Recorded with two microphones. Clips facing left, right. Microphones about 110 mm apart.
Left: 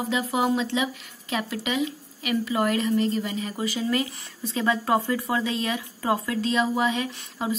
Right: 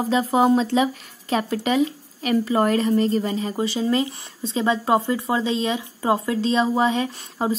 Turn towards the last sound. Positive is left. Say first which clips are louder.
# right 5 dB
turn(degrees=-35)  # may be behind; listen again after turning